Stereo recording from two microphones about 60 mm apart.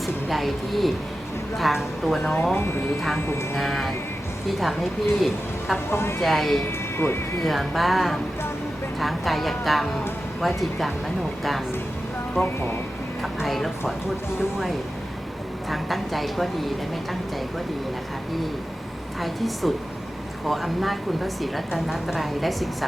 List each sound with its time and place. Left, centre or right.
0.0 s a woman's voice: centre
2.3 s speech: left
3.5 s a woman's voice: centre
5.9 s speech: left
6.2 s a woman's voice: centre
6.7 s speech: left
7.4 s a woman's voice: centre
12.4 s a woman's voice: centre
15.7 s a woman's voice: centre
19.2 s a woman's voice: centre